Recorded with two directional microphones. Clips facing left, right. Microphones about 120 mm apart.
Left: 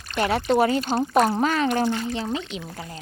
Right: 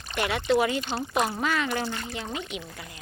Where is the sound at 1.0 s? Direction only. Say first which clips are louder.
Left 9 dB; 50° left (ahead or behind); by 2.9 s 30° left (ahead or behind).